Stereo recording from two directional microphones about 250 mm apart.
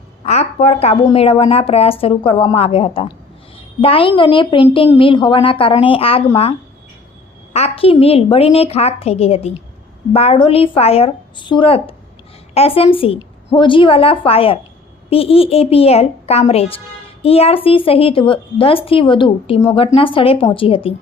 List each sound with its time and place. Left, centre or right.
0.3 s a woman's voice: left
7.5 s speech: left